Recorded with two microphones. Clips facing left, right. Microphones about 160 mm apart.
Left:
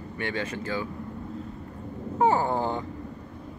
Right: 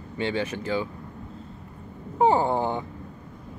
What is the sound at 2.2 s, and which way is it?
Speech, 20° right (ahead or behind).